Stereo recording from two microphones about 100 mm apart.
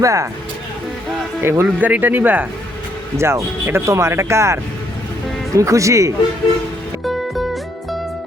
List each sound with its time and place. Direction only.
0.0 s speech: 30° right (ahead or behind)
1.4 s speech: 25° right (ahead or behind)
7.0 s music: centre (ahead or behind)